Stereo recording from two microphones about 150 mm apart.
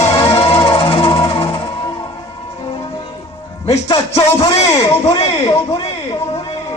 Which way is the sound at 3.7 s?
30° left (ahead or behind).